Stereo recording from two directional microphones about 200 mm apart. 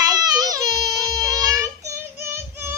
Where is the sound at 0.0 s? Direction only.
20° right (ahead or behind).